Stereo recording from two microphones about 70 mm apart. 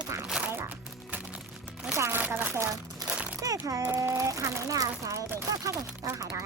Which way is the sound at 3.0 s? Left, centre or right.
Centre.